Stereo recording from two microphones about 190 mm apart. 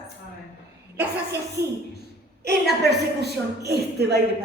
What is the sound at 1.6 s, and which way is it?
Speech, 15° right (ahead or behind).